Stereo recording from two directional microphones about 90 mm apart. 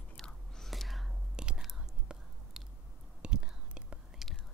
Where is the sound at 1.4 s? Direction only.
10° right (ahead or behind).